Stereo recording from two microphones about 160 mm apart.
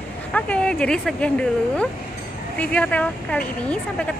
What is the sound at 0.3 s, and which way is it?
Speech, 5° left (ahead or behind).